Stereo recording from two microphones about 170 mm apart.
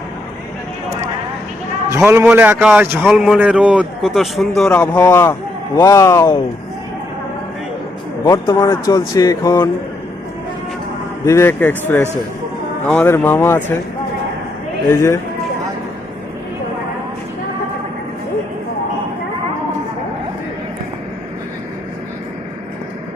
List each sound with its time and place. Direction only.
1.9 s a man's voice: 15° right (ahead or behind); by 6.4 s 20° left (ahead or behind)
8.2 s speech: 15° left (ahead or behind)
11.3 s speech: 15° left (ahead or behind)
14.8 s speech: 15° left (ahead or behind)